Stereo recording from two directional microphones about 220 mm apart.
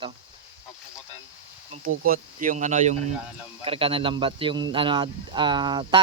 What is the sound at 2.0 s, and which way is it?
Speech, 40° right (ahead or behind).